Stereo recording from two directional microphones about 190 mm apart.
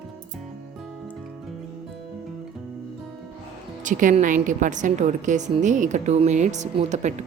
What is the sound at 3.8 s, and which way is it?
A woman's voice, 40° right (ahead or behind).